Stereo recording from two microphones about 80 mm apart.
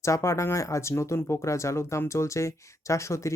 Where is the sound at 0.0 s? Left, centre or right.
Left.